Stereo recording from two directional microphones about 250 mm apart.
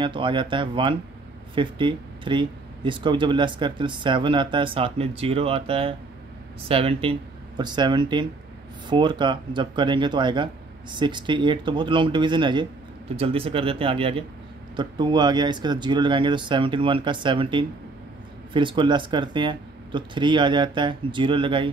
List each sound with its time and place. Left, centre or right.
0.0 s speech: centre